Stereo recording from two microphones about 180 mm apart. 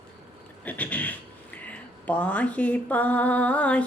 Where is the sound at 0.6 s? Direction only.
10° left (ahead or behind).